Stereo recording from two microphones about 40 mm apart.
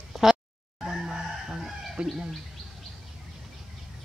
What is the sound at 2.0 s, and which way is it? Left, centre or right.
Bird, right.